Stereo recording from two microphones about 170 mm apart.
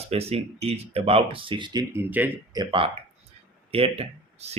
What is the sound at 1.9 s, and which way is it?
Speech, 10° right (ahead or behind).